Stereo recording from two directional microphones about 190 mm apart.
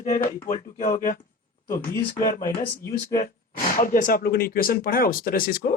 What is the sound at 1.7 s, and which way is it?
Speech, 10° left (ahead or behind).